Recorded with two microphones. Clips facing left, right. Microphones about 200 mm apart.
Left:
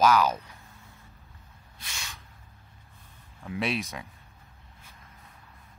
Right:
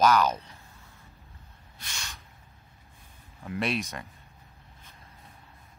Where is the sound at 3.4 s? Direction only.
Centre (ahead or behind).